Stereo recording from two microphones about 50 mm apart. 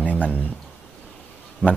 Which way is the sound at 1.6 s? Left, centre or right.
Right.